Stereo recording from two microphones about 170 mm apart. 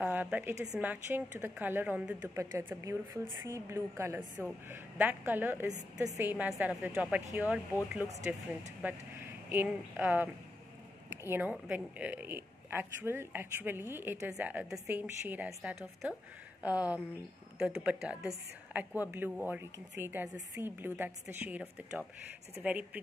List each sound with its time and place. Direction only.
0.0 s a woman's voice: 10° right (ahead or behind)
17.6 s speech: 5° right (ahead or behind)